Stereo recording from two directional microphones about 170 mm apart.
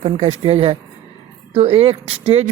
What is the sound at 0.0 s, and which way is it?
Speech, 35° right (ahead or behind).